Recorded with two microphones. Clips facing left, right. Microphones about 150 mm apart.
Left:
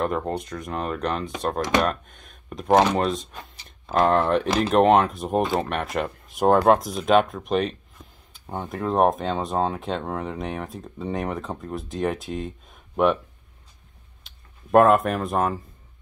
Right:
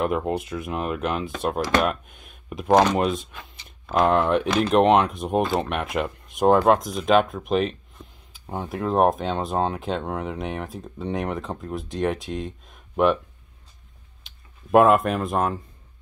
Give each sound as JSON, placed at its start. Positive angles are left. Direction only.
{"t": 0.0, "sound": "speech", "side_deg": -5}
{"t": 3.3, "sound": "speech", "side_deg": 40}
{"t": 4.0, "sound": "speech", "side_deg": -5}
{"t": 14.2, "sound": "speech", "side_deg": 0}